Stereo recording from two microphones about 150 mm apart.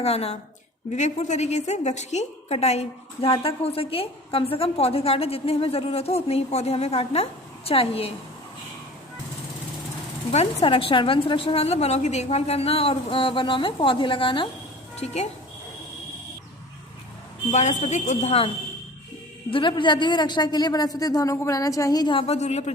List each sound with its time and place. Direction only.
0.0 s a woman's voice: 45° left (ahead or behind)
10.3 s a woman's voice: 40° left (ahead or behind)
14.9 s speech: 45° left (ahead or behind)
17.5 s a woman's voice: 50° left (ahead or behind)